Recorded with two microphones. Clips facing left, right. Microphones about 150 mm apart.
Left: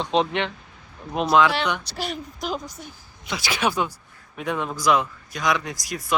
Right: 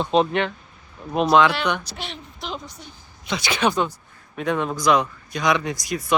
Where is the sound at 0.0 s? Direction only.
10° right (ahead or behind).